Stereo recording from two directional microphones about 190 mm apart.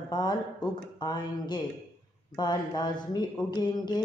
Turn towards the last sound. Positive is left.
turn(degrees=20)  # may be behind; listen again after turning